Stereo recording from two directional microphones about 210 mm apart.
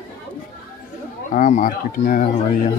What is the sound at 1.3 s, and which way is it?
Speech, 40° left (ahead or behind).